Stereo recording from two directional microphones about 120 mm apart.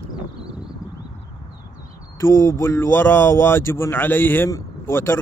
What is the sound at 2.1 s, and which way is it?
Speech, 20° left (ahead or behind).